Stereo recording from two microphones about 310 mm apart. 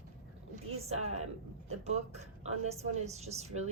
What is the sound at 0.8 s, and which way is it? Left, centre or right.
A woman's voice, centre.